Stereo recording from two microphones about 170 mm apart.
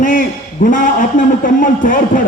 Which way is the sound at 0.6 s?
50° left (ahead or behind).